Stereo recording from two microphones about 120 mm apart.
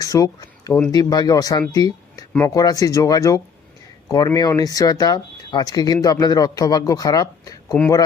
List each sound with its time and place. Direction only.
0.0 s speech: 30° left (ahead or behind)